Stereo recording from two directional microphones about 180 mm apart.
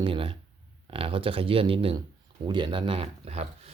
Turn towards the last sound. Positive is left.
turn(degrees=-35)  # may be behind; listen again after turning